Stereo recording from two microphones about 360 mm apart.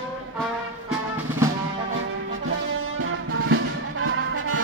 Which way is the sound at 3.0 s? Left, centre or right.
Right.